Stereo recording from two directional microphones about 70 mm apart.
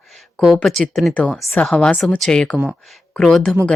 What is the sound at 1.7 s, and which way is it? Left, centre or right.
Speech, centre.